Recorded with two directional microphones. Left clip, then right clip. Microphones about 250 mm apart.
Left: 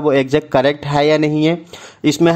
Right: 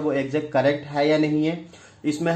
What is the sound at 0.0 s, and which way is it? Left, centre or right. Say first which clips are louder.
Speech: left 10 dB; left.